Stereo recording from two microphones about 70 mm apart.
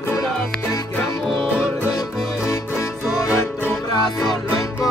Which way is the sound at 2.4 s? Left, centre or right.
Left.